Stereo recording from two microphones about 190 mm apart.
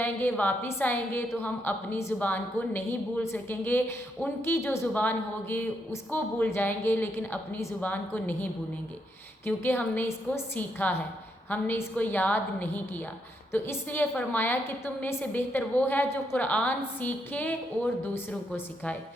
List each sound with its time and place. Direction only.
0.0 s a woman's voice: 10° left (ahead or behind)
9.5 s a woman's voice: 10° left (ahead or behind)